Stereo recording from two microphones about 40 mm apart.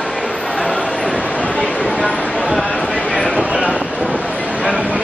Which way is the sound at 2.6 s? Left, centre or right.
Left.